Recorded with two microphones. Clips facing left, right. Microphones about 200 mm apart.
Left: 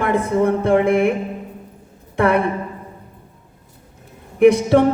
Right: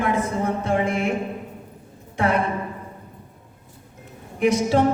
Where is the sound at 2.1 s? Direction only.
60° left (ahead or behind).